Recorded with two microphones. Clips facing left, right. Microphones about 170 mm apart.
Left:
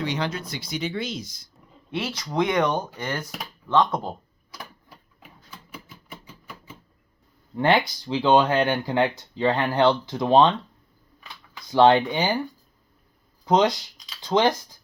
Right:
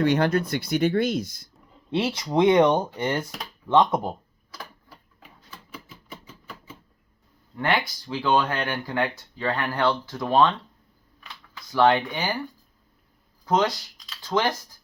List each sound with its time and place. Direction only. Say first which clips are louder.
0.0 s speech: right 7 dB; 55° right (ahead or behind)
1.9 s speech: right 5 dB; 30° right (ahead or behind)
7.5 s speech: left 5 dB; 25° left (ahead or behind)
11.7 s speech: left 3 dB; 25° left (ahead or behind)
13.4 s speech: left 3 dB; 20° left (ahead or behind)